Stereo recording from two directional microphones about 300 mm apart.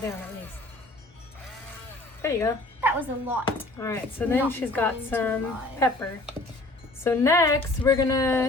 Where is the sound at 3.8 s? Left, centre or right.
Centre.